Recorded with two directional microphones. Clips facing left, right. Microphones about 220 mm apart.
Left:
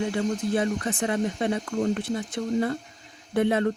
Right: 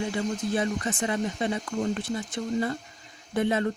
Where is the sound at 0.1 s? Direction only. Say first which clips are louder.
Left 3 dB; 55° left (ahead or behind).